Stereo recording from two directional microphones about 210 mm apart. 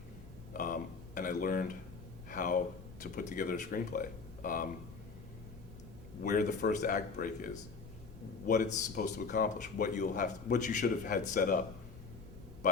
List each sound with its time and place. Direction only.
0.5 s a sound: 40° left (ahead or behind)
2.3 s speech: 40° left (ahead or behind)
6.2 s speech: 35° left (ahead or behind)